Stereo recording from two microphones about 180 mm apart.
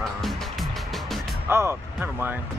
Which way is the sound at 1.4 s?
15° right (ahead or behind).